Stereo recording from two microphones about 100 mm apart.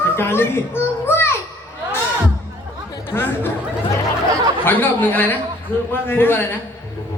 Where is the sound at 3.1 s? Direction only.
20° left (ahead or behind).